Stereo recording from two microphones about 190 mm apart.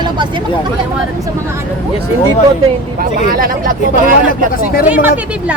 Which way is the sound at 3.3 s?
50° right (ahead or behind).